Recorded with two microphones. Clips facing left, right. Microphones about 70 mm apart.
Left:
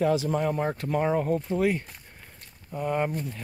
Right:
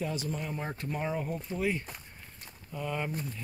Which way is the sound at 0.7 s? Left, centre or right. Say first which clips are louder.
Left 9 dB; left.